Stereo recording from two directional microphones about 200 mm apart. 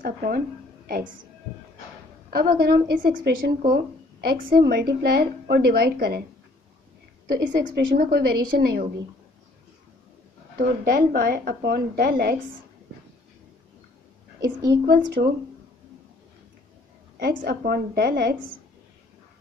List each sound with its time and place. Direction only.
0.0 s a woman's voice: 45° right (ahead or behind)
2.3 s a woman's voice: 50° right (ahead or behind)
7.2 s a woman's voice: 50° right (ahead or behind)
10.6 s a woman's voice: 50° right (ahead or behind)
14.9 s a woman's voice: 50° right (ahead or behind)
17.2 s a woman's voice: 50° right (ahead or behind)